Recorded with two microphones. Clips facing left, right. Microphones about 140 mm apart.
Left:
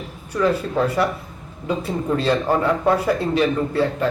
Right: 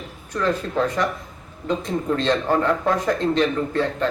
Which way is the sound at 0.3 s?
10° left (ahead or behind).